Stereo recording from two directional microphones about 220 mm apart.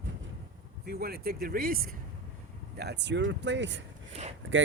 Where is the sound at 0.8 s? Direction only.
45° right (ahead or behind).